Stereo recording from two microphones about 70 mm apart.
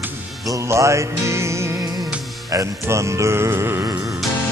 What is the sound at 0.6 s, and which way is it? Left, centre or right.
Music, right.